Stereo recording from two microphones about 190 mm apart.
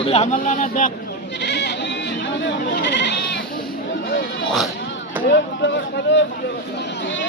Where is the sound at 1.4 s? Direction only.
65° left (ahead or behind).